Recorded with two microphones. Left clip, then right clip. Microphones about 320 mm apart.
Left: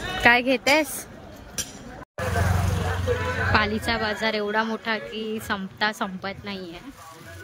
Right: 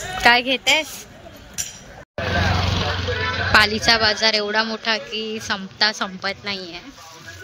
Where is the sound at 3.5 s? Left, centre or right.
Centre.